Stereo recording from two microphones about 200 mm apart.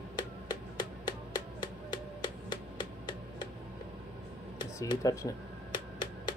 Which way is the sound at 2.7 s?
20° left (ahead or behind).